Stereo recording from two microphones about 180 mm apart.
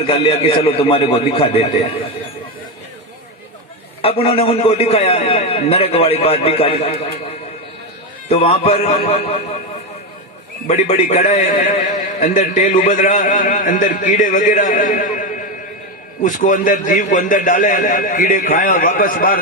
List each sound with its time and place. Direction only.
0.1 s a man's voice: 30° left (ahead or behind)
4.0 s a man's voice: 30° left (ahead or behind)
8.3 s a man's voice: 35° left (ahead or behind)
10.7 s a man's voice: 35° left (ahead or behind)
16.2 s a man's voice: 45° left (ahead or behind)